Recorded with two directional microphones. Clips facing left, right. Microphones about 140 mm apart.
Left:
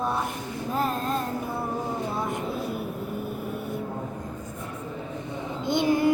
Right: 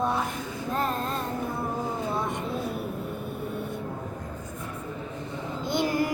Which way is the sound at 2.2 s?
Centre (ahead or behind).